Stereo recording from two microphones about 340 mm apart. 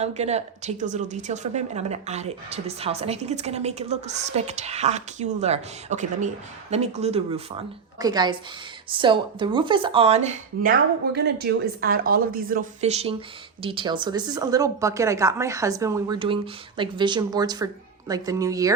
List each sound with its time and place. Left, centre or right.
0.0 s a woman's voice: centre